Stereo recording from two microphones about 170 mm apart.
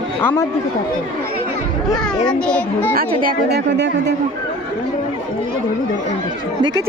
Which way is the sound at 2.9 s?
60° right (ahead or behind).